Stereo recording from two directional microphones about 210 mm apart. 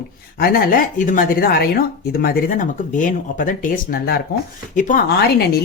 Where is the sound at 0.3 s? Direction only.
45° left (ahead or behind).